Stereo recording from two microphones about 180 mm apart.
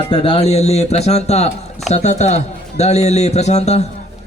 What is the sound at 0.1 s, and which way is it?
Speech, 30° left (ahead or behind).